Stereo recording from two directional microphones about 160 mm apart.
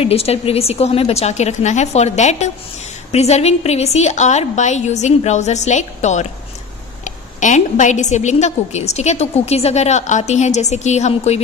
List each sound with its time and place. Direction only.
0.0 s a woman's voice: 40° left (ahead or behind)